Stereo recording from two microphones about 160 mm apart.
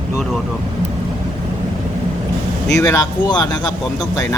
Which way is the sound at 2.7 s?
20° left (ahead or behind).